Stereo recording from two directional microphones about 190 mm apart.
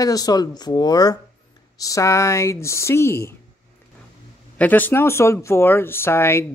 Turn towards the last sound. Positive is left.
turn(degrees=15)  # may be behind; listen again after turning